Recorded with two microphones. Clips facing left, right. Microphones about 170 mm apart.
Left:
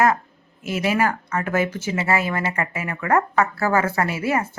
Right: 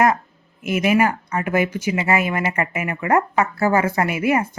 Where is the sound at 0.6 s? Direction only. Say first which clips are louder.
Right 3 dB; 20° right (ahead or behind).